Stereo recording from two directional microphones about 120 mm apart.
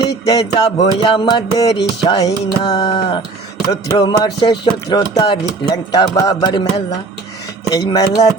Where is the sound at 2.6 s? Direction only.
50° left (ahead or behind).